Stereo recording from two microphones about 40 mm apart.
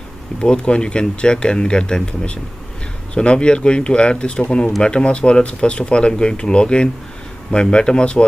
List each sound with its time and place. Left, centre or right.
0.4 s speech: left